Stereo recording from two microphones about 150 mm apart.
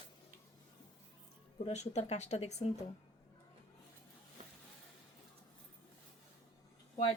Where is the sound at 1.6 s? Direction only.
50° left (ahead or behind).